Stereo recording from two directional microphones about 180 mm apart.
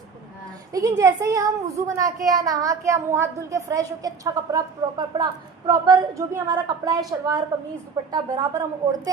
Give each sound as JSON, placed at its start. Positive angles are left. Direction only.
{"t": 0.7, "sound": "a child's voice", "side_deg": -20}